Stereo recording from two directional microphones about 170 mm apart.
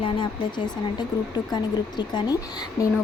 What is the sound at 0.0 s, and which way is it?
Speech, 30° left (ahead or behind).